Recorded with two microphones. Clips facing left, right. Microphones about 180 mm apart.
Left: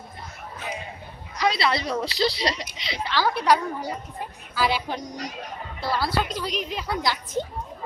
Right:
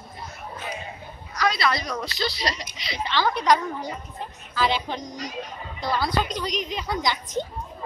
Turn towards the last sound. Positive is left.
turn(degrees=5)  # may be behind; listen again after turning